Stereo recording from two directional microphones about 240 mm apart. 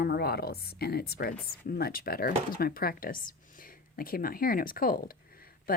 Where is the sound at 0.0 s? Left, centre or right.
Left.